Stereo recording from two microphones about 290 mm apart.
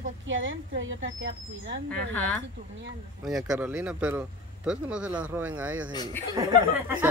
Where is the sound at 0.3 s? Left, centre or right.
Right.